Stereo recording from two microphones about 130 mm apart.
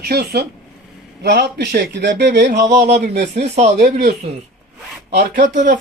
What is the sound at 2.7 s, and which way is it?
Speech, 75° right (ahead or behind).